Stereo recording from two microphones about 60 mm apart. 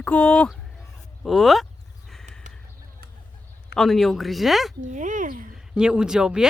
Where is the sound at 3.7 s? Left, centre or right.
Centre.